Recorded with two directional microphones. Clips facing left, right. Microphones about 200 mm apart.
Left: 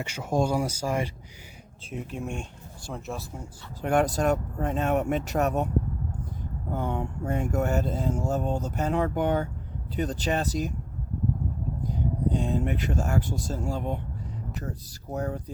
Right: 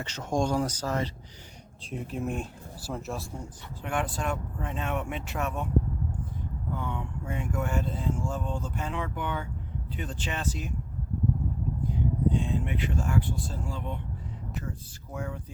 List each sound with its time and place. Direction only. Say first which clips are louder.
0.0 s speech: left 2 dB; 10° left (ahead or behind)
1.9 s speech: right 1 dB; centre (ahead or behind)
3.8 s speech: left 8 dB; 40° left (ahead or behind)
6.7 s speech: left 6 dB; 45° left (ahead or behind)
12.3 s speech: left 3 dB; 40° left (ahead or behind)